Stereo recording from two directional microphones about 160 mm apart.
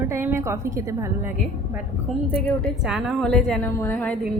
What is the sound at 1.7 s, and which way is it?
Speech, 5° left (ahead or behind).